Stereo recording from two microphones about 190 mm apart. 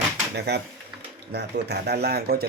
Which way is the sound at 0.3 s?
60° right (ahead or behind).